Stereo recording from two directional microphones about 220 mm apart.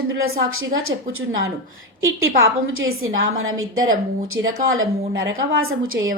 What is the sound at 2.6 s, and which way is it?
A woman's voice, 65° right (ahead or behind).